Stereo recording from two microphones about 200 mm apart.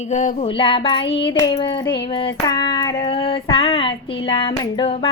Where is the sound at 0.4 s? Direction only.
25° left (ahead or behind).